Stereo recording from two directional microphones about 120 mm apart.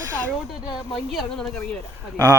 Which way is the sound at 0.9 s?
5° left (ahead or behind).